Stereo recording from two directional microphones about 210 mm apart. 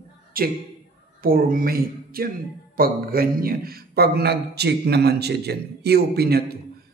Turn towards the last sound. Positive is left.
turn(degrees=-50)  # may be behind; listen again after turning